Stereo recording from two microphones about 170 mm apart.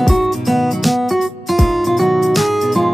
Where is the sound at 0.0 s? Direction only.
Centre (ahead or behind).